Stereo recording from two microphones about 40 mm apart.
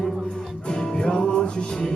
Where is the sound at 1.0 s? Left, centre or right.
Centre.